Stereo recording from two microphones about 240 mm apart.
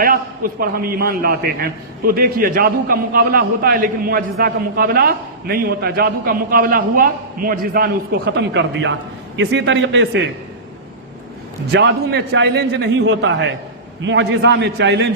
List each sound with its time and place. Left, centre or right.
0.0 s a man's voice: right
11.7 s a man's voice: right